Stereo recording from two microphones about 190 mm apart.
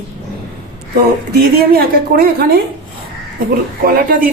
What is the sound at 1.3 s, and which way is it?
A woman's voice, 55° right (ahead or behind).